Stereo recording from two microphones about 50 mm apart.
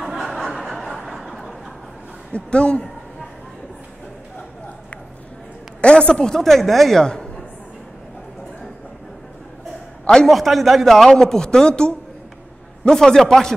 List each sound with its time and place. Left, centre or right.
0.0 s chuckle: centre
2.3 s speech: left
5.8 s a sound: left
6.3 s speech: centre
10.2 s a man's voice: centre